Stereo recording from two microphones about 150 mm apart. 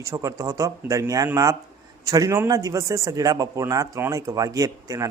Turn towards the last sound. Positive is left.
turn(degrees=-20)  # may be behind; listen again after turning